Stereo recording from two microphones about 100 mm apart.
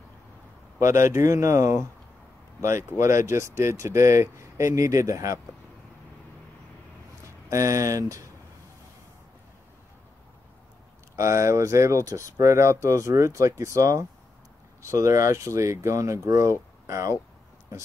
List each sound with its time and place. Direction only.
0.7 s speech: 30° right (ahead or behind)
3.0 s speech: 30° right (ahead or behind)
7.4 s speech: 35° right (ahead or behind)
11.1 s speech: 30° right (ahead or behind)